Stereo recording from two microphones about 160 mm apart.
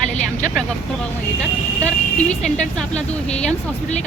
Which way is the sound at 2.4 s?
5° left (ahead or behind).